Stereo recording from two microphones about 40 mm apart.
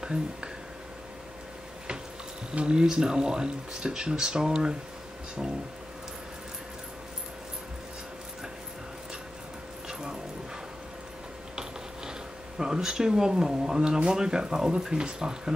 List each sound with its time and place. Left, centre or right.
0.0 s speech: centre
2.5 s speech: right
9.8 s music: centre
12.1 s speech: centre